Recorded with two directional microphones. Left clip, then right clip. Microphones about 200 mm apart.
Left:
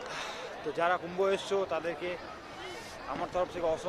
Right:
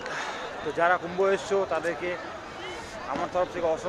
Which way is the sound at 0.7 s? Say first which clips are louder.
Right 6 dB; 10° left (ahead or behind).